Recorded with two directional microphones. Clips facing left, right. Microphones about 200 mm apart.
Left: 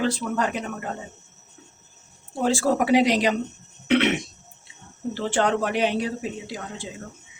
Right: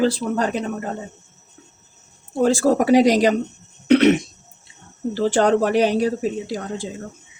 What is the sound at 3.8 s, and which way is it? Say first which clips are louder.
Cough: right 7 dB; 40° right (ahead or behind).